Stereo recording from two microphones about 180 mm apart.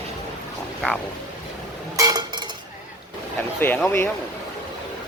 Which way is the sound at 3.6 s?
10° left (ahead or behind).